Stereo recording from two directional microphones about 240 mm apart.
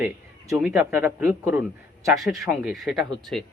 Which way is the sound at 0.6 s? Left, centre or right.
Centre.